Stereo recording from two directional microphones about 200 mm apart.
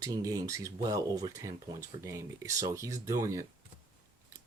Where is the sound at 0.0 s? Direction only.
15° right (ahead or behind).